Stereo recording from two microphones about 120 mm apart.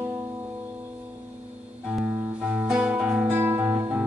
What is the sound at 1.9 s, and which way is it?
Music, 10° right (ahead or behind).